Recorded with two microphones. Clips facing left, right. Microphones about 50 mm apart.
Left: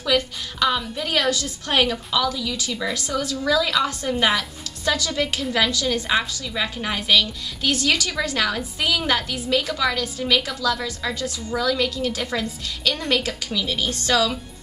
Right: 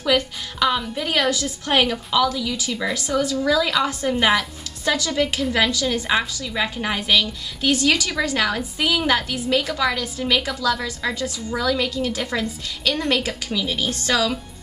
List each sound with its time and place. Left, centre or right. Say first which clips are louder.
0.0 s a woman's voice: right 1 dB; centre
6.0 s a woman's voice: right 1 dB; centre